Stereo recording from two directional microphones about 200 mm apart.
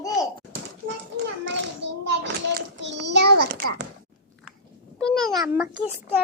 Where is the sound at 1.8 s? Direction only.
60° right (ahead or behind).